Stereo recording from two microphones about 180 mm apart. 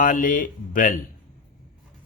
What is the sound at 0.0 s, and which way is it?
Speech, 45° left (ahead or behind).